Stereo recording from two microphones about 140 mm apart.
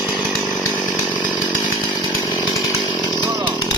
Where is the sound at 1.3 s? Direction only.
10° right (ahead or behind).